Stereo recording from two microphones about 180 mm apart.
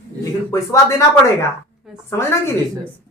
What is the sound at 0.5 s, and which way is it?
A man's voice, 15° left (ahead or behind).